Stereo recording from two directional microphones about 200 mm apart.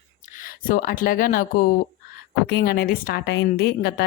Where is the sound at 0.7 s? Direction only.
45° left (ahead or behind).